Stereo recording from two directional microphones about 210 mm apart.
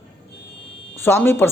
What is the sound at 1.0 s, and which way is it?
Speech, 10° left (ahead or behind).